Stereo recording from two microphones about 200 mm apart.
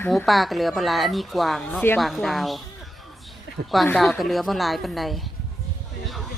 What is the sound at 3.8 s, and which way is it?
A woman's voice, 5° left (ahead or behind).